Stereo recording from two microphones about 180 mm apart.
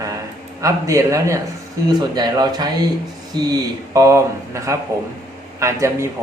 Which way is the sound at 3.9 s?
15° right (ahead or behind).